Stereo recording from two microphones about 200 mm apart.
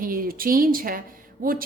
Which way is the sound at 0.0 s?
45° right (ahead or behind).